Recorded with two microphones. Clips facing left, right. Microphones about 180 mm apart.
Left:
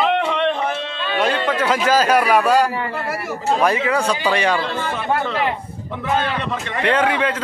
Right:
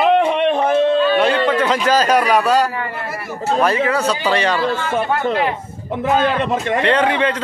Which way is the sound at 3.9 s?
10° left (ahead or behind).